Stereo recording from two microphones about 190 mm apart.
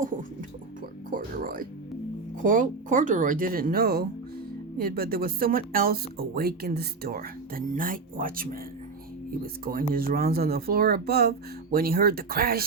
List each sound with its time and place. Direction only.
1.1 s music: 45° right (ahead or behind)
2.4 s speech: 45° right (ahead or behind)
9.9 s speech: 50° right (ahead or behind)